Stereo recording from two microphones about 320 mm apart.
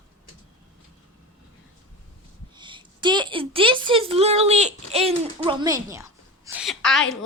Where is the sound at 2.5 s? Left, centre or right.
Centre.